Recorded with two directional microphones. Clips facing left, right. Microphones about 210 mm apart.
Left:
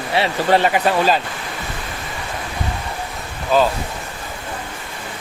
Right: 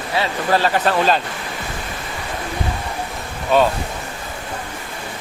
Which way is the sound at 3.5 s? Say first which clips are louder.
Right 1 dB; centre (ahead or behind).